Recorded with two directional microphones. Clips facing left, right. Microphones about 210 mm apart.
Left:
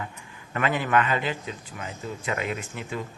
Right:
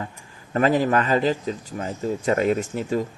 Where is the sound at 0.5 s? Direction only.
35° right (ahead or behind).